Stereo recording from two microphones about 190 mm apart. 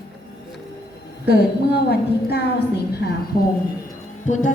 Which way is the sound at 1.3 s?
60° left (ahead or behind).